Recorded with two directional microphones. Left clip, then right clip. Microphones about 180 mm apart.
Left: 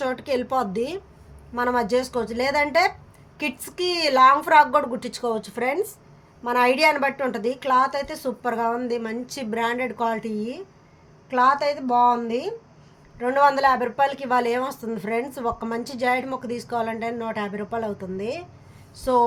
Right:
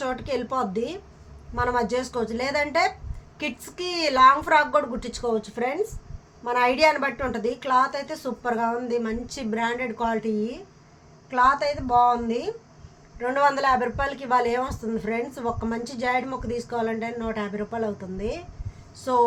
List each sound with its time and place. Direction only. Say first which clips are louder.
0.0 s speech: left 3 dB; 40° left (ahead or behind)